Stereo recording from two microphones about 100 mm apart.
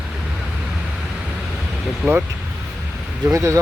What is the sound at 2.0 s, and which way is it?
Speech, 15° right (ahead or behind).